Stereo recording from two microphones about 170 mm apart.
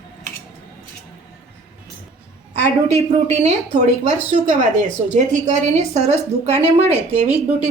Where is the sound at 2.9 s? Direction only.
40° right (ahead or behind).